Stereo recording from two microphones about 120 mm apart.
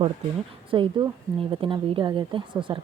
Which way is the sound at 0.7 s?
45° right (ahead or behind).